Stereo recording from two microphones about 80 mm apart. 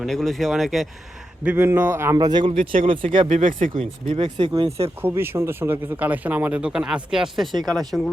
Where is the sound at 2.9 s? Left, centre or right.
Right.